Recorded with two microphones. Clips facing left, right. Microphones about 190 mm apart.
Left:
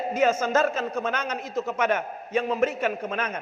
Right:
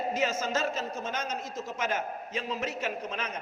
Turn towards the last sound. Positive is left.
turn(degrees=55)  # may be behind; listen again after turning